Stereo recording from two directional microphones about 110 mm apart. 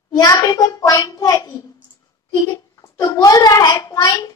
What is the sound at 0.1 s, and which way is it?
A child's voice, 35° left (ahead or behind).